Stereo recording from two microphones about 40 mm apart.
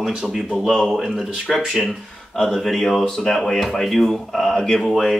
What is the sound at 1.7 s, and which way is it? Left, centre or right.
Speech, centre.